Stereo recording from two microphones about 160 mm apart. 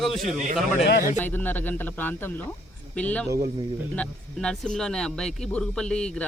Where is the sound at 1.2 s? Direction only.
10° left (ahead or behind).